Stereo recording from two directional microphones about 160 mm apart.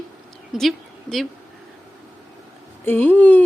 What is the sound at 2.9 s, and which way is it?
Speech, 10° left (ahead or behind).